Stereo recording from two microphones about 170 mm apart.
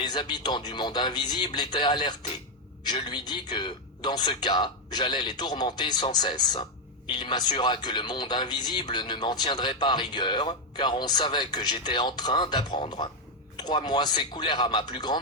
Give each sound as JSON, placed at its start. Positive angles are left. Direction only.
{"t": 0.0, "sound": "speech", "side_deg": 25}